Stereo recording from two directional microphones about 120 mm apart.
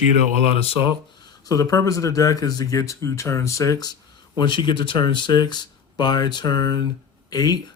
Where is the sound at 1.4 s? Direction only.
30° left (ahead or behind).